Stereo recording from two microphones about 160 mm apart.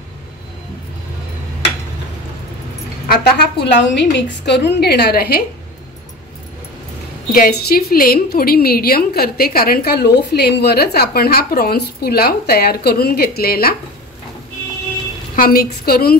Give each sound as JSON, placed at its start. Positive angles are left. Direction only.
{"t": 3.1, "sound": "a woman's voice", "side_deg": 90}
{"t": 7.3, "sound": "a woman's voice", "side_deg": 70}
{"t": 15.3, "sound": "a woman's voice", "side_deg": 65}